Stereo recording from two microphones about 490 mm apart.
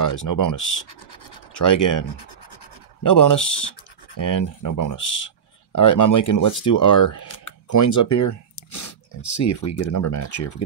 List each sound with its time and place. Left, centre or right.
0.0 s speech: left
0.8 s scratch: left
1.6 s speech: left